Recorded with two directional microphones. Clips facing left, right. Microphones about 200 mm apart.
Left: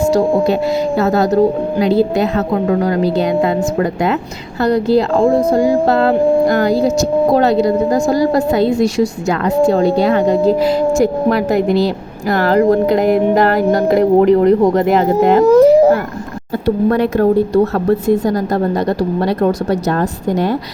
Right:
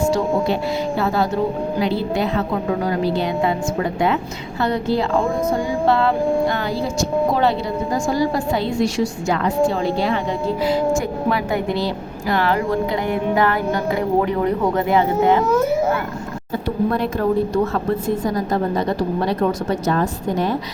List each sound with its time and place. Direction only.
0.0 s speech: 40° left (ahead or behind)
2.6 s speech: 40° left (ahead or behind)
4.6 s speech: 40° left (ahead or behind)
10.1 s speech: 40° left (ahead or behind)
12.3 s speech: 40° left (ahead or behind)
17.5 s speech: 40° left (ahead or behind)